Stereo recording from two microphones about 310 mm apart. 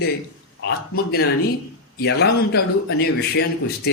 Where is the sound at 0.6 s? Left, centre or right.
Left.